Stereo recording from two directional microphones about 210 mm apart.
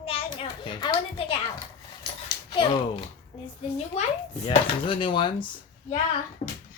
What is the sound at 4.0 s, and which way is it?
A child's voice, 30° left (ahead or behind).